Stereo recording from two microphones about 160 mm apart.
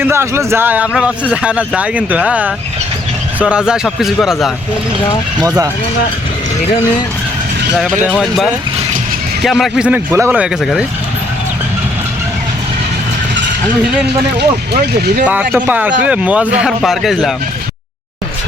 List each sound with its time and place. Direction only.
0.0 s a man's voice: 15° right (ahead or behind)
5.4 s speech: 25° right (ahead or behind)
7.8 s a man's voice: 5° right (ahead or behind)
10.6 s a man's voice: centre (ahead or behind)
14.3 s speech: 90° right
15.2 s a man's voice: 10° right (ahead or behind)